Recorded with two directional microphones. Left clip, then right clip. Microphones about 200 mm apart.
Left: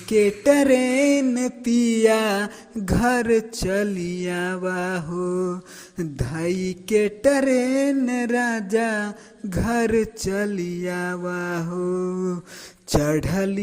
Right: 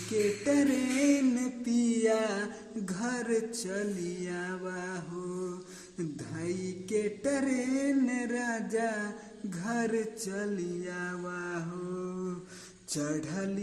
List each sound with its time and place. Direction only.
0.4 s mantra: 35° left (ahead or behind)